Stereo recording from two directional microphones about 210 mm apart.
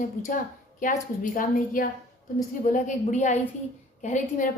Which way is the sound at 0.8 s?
40° left (ahead or behind).